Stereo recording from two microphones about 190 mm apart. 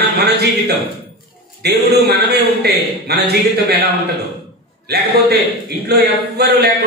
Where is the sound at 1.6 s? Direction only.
60° right (ahead or behind).